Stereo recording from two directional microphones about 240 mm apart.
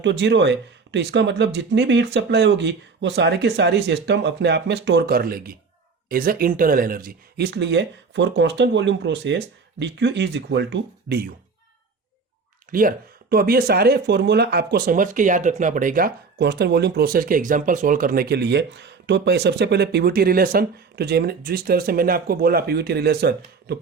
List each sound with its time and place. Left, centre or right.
0.0 s speech: right
12.7 s speech: right